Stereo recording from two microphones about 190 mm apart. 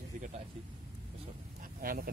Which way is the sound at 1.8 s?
50° right (ahead or behind).